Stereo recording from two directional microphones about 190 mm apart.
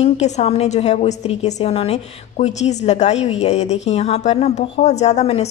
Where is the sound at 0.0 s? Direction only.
35° left (ahead or behind).